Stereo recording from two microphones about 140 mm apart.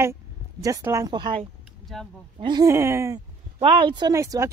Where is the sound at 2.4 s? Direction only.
35° right (ahead or behind).